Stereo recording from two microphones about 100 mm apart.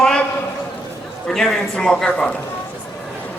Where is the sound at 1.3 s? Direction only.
5° left (ahead or behind).